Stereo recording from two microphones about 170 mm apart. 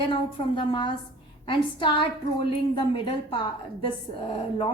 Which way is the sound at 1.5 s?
30° left (ahead or behind).